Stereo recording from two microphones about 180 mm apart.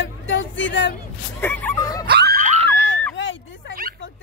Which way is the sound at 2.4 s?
40° right (ahead or behind).